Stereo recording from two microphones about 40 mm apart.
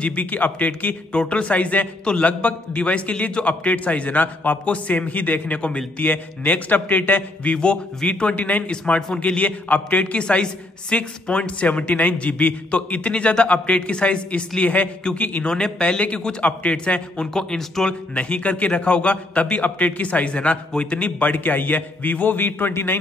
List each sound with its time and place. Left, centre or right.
0.0 s a man's voice: left
1.1 s a man's voice: left
4.6 s a man's voice: left
6.0 s a man's voice: left
7.5 s a man's voice: left
8.4 s a man's voice: left
11.6 s a man's voice: left
14.6 s a man's voice: left
15.4 s a man's voice: left
17.3 s a man's voice: centre
17.8 s a man's voice: left
22.7 s a man's voice: left